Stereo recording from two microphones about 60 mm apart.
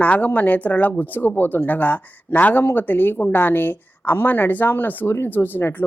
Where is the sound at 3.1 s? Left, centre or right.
Left.